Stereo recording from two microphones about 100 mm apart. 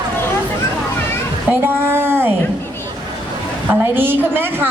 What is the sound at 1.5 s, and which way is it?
Speech, 20° right (ahead or behind).